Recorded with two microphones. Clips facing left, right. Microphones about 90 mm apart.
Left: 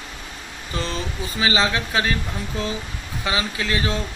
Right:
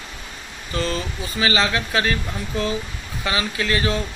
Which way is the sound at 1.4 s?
20° left (ahead or behind).